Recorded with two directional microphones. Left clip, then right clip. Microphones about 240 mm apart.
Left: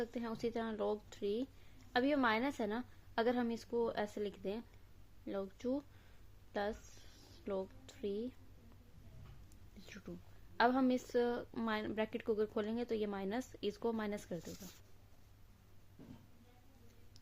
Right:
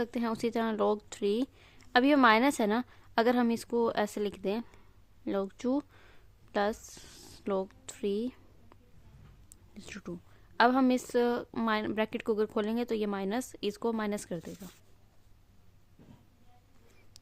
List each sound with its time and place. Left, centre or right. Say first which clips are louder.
0.0 s a woman's voice: right 8 dB; right
5.2 s a sound: right 9 dB; right
9.7 s a woman's voice: right 9 dB; right; by 14.7 s centre